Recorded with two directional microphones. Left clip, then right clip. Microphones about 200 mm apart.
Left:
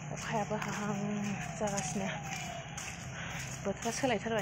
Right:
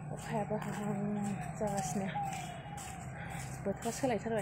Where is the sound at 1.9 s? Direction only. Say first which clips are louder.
Left 1 dB; centre (ahead or behind).